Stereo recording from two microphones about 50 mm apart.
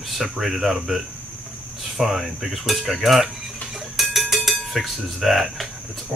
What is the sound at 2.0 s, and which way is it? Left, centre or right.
Speech, centre.